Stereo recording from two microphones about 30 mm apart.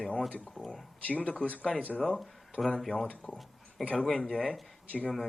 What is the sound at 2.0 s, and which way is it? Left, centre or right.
Speech, centre.